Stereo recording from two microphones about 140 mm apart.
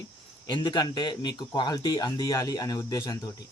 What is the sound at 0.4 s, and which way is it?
Speech, 30° left (ahead or behind).